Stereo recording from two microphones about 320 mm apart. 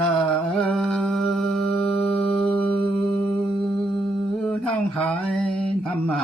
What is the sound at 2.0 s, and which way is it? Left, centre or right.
Music, centre.